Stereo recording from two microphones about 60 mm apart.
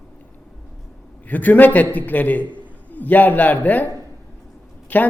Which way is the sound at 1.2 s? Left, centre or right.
Left.